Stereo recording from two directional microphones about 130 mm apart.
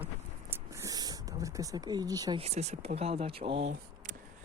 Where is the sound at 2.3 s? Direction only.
55° right (ahead or behind).